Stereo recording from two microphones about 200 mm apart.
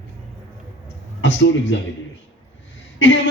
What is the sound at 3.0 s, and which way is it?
Speech, 70° left (ahead or behind).